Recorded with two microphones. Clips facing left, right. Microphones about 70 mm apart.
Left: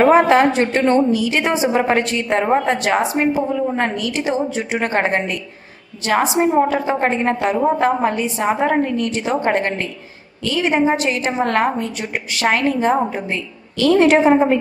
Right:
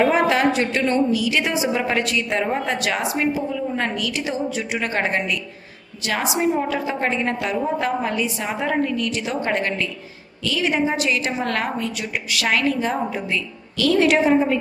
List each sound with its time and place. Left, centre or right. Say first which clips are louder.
0.0 s a woman's voice: left 6 dB; left